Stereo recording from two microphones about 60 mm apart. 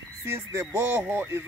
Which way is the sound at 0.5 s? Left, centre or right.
Right.